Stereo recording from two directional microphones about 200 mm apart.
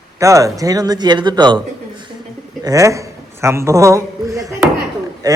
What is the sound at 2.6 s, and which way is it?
A man's voice, 15° right (ahead or behind).